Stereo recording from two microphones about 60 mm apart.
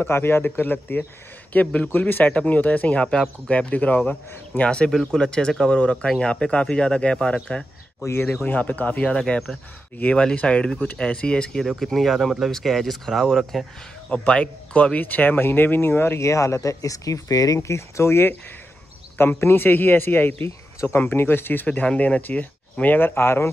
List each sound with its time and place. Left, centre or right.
0.0 s speech: left
4.6 s speech: centre
8.5 s speech: left
11.6 s speech: centre
14.1 s speech: centre; by 16.3 s left
16.3 s speech: left
19.1 s speech: left
20.4 s speech: left
21.6 s speech: centre; by 23.5 s left